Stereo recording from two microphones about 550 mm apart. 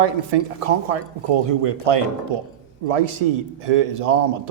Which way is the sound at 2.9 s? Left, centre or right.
Right.